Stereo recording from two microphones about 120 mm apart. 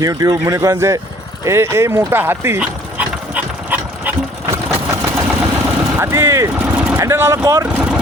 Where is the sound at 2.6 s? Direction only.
10° right (ahead or behind).